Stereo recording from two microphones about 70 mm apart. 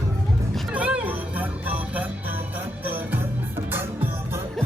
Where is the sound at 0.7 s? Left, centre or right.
Centre.